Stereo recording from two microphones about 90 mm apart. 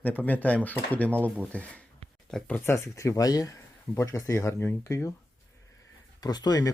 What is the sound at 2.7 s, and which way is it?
Speech, 30° left (ahead or behind).